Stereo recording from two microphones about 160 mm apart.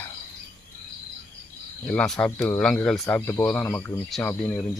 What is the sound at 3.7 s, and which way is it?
Speech, 15° left (ahead or behind).